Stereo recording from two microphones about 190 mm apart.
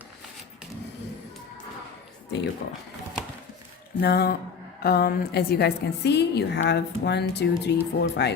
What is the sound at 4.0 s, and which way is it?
A woman's voice, 55° left (ahead or behind).